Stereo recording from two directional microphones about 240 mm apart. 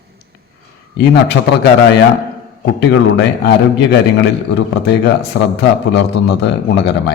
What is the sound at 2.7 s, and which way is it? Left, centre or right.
A man's voice, left.